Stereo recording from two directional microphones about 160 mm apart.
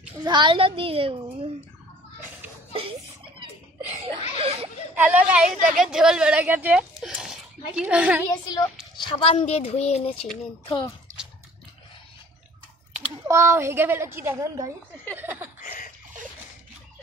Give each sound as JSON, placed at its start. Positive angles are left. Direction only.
{"t": 0.2, "sound": "a child's voice", "side_deg": -30}
{"t": 2.7, "sound": "a sound", "side_deg": -35}
{"t": 4.9, "sound": "a woman's voice", "side_deg": -10}
{"t": 8.9, "sound": "speech", "side_deg": 30}
{"t": 12.9, "sound": "a woman's voice", "side_deg": -15}
{"t": 15.6, "sound": "a sound", "side_deg": 55}